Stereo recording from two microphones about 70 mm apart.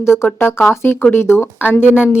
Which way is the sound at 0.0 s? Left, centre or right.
Left.